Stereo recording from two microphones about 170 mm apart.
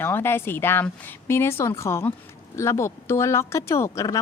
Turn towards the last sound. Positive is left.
turn(degrees=20)  # may be behind; listen again after turning